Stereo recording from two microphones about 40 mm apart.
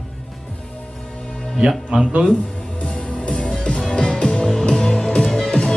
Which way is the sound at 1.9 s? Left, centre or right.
Right.